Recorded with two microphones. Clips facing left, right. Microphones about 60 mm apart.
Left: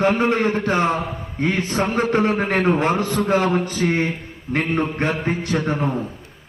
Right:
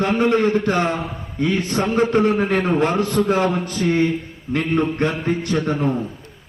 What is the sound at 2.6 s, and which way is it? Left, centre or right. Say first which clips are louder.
A man's voice: even; left.